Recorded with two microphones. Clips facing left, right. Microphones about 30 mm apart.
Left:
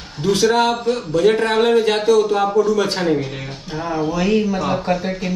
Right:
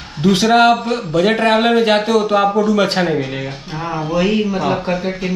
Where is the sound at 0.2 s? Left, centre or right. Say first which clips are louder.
Right 4 dB; right.